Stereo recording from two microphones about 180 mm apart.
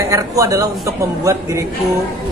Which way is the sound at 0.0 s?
20° right (ahead or behind).